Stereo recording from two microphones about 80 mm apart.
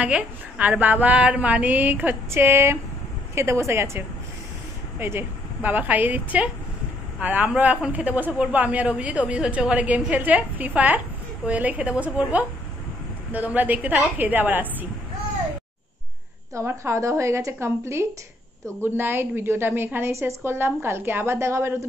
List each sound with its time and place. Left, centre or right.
0.0 s a woman's voice: centre
16.5 s a woman's voice: right